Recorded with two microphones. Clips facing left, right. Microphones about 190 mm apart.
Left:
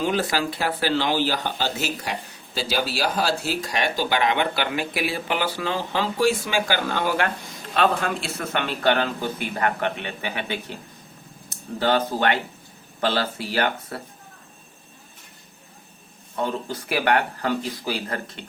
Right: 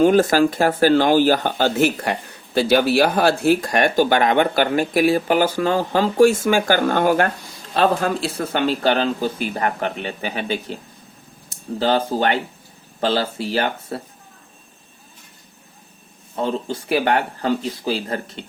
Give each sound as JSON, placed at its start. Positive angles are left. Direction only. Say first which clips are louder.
{"t": 0.0, "sound": "speech", "louder": "right 10 dB", "side_deg": -45}
{"t": 7.7, "sound": "a man's voice", "louder": "right 4 dB", "side_deg": -35}
{"t": 16.3, "sound": "speech", "louder": "right 4 dB", "side_deg": -30}